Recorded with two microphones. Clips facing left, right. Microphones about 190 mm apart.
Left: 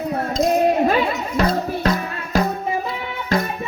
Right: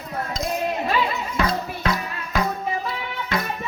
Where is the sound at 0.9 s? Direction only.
50° left (ahead or behind).